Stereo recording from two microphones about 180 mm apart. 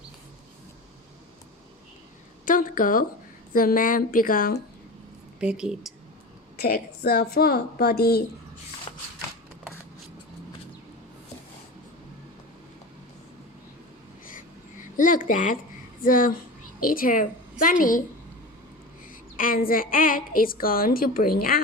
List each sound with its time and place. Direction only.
2.4 s a woman's voice: 50° left (ahead or behind)
5.4 s a woman's voice: 5° right (ahead or behind)
6.6 s a woman's voice: 55° left (ahead or behind)
8.9 s a sound: 30° left (ahead or behind)
14.9 s a sound: 45° left (ahead or behind)
16.0 s a woman's voice: 50° left (ahead or behind)
19.4 s a woman's voice: 50° left (ahead or behind)